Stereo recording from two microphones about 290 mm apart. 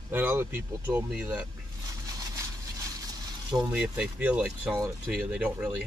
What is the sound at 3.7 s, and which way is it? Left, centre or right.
Speech, centre.